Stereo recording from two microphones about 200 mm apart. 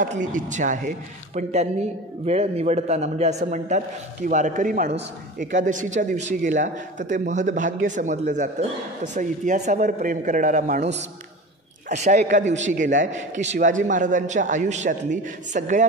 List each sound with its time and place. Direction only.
0.0 s speech: 40° right (ahead or behind)